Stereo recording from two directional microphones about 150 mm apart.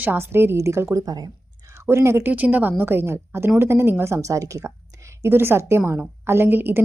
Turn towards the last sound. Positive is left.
turn(degrees=-15)  # may be behind; listen again after turning